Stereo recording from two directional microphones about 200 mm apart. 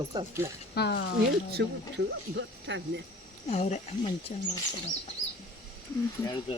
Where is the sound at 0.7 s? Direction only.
55° left (ahead or behind).